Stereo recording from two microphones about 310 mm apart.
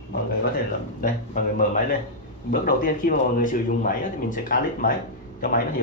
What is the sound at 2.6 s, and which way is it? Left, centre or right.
Speech, left.